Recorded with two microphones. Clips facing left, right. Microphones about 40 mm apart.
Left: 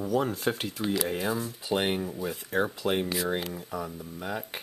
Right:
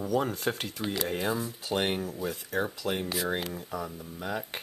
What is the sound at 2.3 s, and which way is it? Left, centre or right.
Speech, centre.